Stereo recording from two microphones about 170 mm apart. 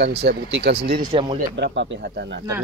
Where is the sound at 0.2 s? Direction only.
80° right.